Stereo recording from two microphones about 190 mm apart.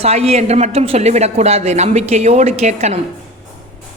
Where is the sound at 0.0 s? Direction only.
35° right (ahead or behind).